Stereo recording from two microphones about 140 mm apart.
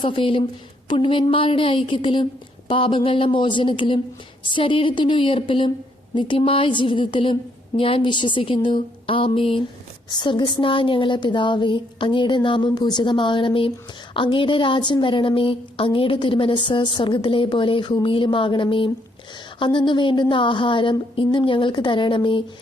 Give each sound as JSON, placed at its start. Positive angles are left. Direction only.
{"t": 0.0, "sound": "a woman's voice", "side_deg": 40}